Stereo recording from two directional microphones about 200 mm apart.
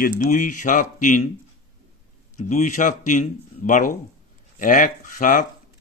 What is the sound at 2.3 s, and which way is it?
Speech, 40° left (ahead or behind).